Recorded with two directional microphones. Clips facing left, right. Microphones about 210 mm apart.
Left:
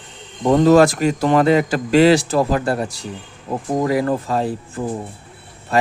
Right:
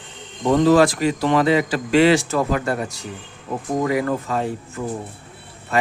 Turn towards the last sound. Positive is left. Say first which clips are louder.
# left 3 dB
turn(degrees=30)  # may be behind; listen again after turning